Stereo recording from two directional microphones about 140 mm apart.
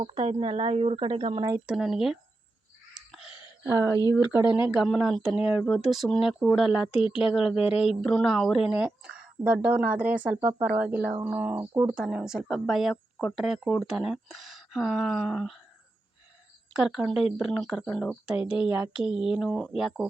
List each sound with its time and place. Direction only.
0.0 s speech: 50° right (ahead or behind)
1.6 s speech: 5° right (ahead or behind)
3.1 s a sound: 5° right (ahead or behind)
3.6 s speech: 20° right (ahead or behind)
4.7 s speech: 5° right (ahead or behind)
6.9 s speech: 40° left (ahead or behind)
7.3 s speech: 5° right (ahead or behind)
16.7 s speech: 5° right (ahead or behind)
18.6 s speech: 10° right (ahead or behind)